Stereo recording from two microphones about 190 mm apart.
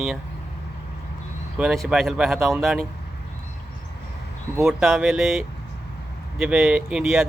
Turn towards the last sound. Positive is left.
turn(degrees=-5)  # may be behind; listen again after turning